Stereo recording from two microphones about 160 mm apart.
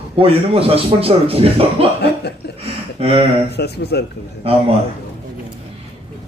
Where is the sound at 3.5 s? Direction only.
90° left.